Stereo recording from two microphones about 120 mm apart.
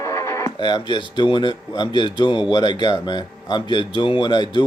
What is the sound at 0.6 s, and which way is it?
Speech, 40° left (ahead or behind).